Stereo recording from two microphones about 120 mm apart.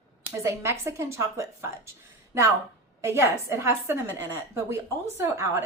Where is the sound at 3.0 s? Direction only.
20° right (ahead or behind).